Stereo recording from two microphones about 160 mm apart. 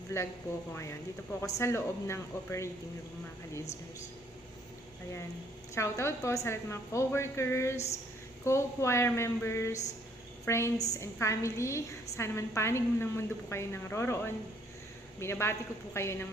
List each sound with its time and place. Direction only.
0.1 s a woman's voice: 15° left (ahead or behind)
5.7 s a woman's voice: 15° left (ahead or behind)